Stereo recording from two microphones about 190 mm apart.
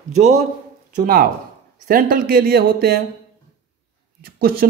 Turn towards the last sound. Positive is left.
turn(degrees=-50)  # may be behind; listen again after turning